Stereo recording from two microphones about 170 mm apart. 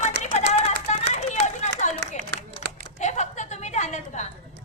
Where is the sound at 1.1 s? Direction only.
40° left (ahead or behind).